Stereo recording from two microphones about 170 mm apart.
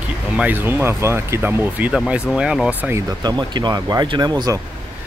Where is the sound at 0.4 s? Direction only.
10° right (ahead or behind).